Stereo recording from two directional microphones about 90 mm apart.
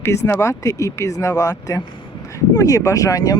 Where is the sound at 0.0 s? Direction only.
30° left (ahead or behind).